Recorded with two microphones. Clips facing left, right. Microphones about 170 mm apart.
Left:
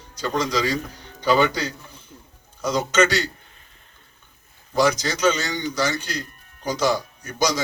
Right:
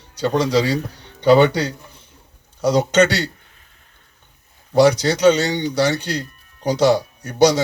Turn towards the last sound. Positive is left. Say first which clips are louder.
# right 9 dB
turn(degrees=-70)  # may be behind; listen again after turning